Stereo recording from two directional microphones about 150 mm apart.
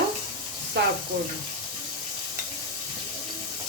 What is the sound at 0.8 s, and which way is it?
Bathtub, 90° right.